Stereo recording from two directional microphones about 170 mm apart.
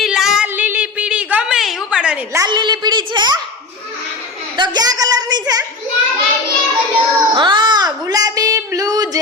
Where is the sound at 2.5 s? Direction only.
25° right (ahead or behind).